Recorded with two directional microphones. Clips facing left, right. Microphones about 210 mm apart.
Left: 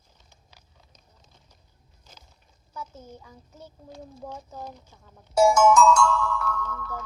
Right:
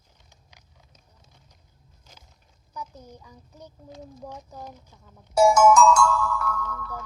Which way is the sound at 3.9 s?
20° right (ahead or behind).